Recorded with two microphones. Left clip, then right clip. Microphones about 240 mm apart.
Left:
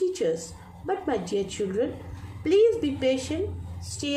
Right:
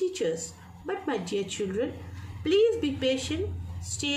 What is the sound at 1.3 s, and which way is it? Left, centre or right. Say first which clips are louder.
A woman's voice: left 3 dB; centre.